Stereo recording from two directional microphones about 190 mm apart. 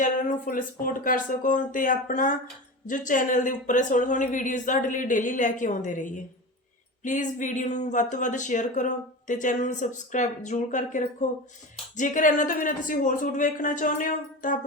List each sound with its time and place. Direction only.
0.0 s speech: 45° left (ahead or behind)